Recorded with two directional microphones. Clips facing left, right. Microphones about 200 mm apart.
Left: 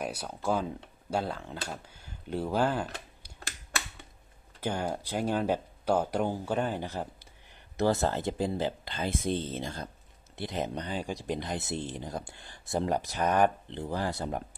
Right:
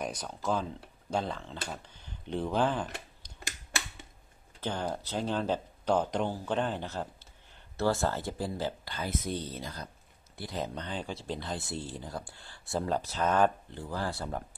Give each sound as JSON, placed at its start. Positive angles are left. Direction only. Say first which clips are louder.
{"t": 0.0, "sound": "speech", "louder": "left 1 dB", "side_deg": 10}
{"t": 4.6, "sound": "speech", "louder": "left 2 dB", "side_deg": 10}